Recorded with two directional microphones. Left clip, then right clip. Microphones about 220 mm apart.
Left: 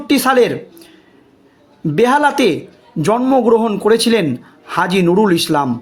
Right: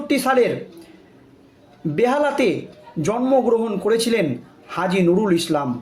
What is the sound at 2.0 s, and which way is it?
Speech, 45° left (ahead or behind).